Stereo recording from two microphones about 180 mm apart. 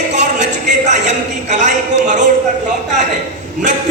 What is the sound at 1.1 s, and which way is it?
Speech, 40° right (ahead or behind).